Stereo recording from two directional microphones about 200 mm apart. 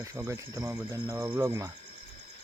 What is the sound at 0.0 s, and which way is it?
Speech, 15° right (ahead or behind).